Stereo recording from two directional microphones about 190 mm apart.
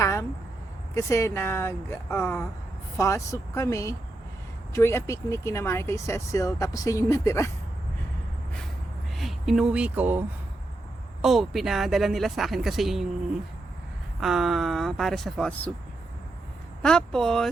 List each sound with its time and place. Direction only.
0.0 s a sound: 15° left (ahead or behind)
0.9 s speech: 15° left (ahead or behind)
9.1 s speech: centre (ahead or behind)
14.2 s speech: centre (ahead or behind)
16.8 s speech: 5° left (ahead or behind)